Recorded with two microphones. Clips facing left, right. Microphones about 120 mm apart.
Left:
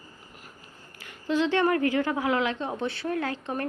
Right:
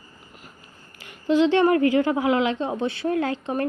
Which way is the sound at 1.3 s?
20° right (ahead or behind).